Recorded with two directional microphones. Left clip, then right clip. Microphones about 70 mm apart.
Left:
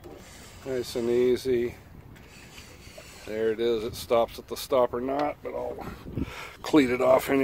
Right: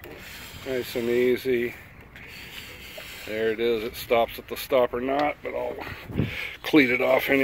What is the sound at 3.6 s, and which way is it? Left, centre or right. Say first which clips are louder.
Speech: right 2 dB; left.